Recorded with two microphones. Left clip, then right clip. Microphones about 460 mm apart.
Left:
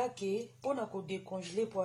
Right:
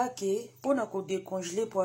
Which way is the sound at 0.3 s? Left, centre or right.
Left.